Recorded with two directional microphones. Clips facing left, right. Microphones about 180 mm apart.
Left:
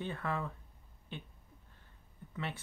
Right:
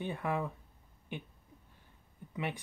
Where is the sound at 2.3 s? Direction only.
15° right (ahead or behind).